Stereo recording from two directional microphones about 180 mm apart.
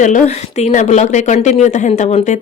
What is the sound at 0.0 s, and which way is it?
A woman's voice, 40° left (ahead or behind).